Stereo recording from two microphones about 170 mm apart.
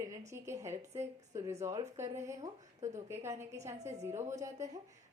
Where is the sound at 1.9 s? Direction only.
15° right (ahead or behind).